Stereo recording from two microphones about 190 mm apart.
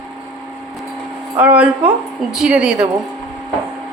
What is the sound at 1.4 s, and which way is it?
A man's voice, 5° right (ahead or behind).